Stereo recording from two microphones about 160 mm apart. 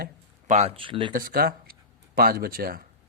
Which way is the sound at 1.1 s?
65° right (ahead or behind).